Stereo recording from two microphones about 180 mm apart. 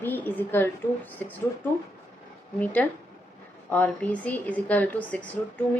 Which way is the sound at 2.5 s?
10° left (ahead or behind).